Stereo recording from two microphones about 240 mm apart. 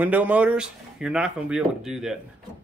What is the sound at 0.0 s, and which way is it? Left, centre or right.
Speech, centre.